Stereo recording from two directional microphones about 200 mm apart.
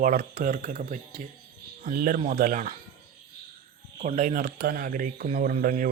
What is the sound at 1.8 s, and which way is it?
Speech, 45° right (ahead or behind).